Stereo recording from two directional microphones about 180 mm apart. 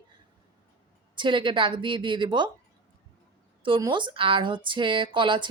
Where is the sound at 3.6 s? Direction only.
25° right (ahead or behind).